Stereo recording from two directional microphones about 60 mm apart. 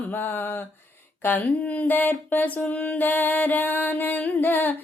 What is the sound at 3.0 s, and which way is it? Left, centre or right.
Music, left.